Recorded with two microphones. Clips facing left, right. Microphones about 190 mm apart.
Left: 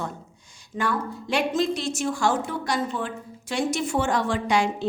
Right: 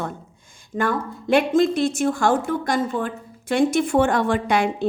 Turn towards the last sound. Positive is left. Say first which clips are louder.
# right 3 dB
turn(degrees=-55)  # may be behind; listen again after turning